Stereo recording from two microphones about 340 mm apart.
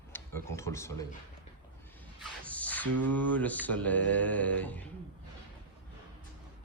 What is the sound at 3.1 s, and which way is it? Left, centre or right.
Mantra, centre.